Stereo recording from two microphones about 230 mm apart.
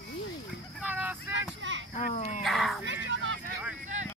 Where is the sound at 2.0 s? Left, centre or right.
Left.